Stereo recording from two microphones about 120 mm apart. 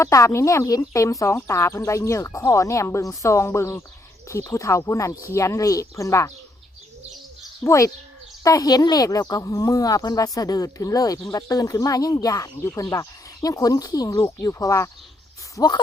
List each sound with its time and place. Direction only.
0.0 s speech: 25° left (ahead or behind)
7.6 s speech: 25° left (ahead or behind)